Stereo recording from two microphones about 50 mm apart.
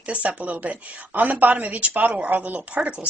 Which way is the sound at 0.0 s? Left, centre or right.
Right.